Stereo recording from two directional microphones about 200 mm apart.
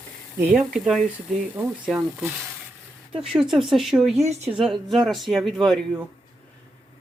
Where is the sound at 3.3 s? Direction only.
Centre (ahead or behind).